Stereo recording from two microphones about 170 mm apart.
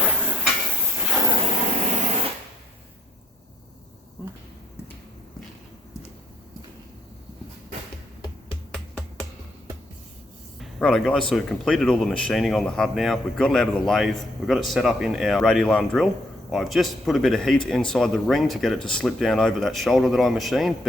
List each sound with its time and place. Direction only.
0.0 s a sound: 5° right (ahead or behind)
1.9 s spray: 40° right (ahead or behind)
8.7 s finger snapping: 5° left (ahead or behind)
10.6 s speech: 5° left (ahead or behind)